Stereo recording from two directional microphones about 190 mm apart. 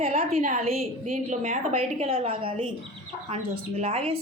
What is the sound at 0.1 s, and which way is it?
A woman's voice, 35° right (ahead or behind).